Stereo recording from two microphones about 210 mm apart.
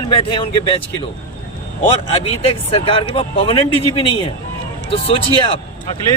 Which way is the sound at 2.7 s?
25° left (ahead or behind).